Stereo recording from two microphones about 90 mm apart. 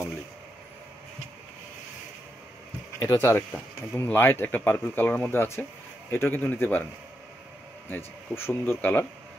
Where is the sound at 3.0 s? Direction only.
30° left (ahead or behind).